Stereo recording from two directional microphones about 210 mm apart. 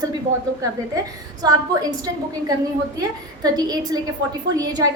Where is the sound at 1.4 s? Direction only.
20° right (ahead or behind).